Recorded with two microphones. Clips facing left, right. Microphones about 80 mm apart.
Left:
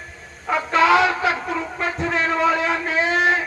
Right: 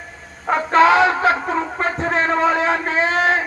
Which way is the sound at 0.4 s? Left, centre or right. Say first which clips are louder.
Right 4 dB; right.